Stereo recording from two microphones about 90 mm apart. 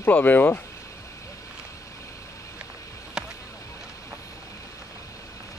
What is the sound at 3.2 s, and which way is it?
Boat, 10° right (ahead or behind).